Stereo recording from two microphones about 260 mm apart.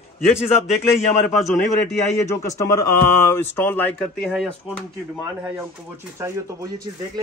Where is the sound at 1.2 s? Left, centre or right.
Centre.